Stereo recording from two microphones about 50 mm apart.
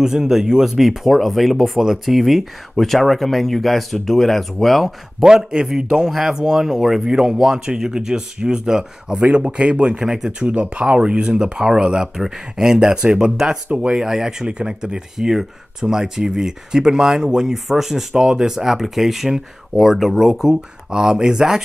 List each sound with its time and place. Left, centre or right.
0.0 s speech: centre
5.2 s speech: centre
9.3 s speech: right
10.4 s speech: right